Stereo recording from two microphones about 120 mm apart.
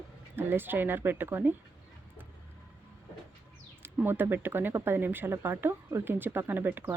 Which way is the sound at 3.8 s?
20° right (ahead or behind).